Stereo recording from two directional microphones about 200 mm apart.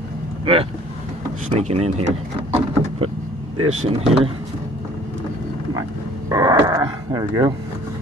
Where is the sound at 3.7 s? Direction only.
35° right (ahead or behind).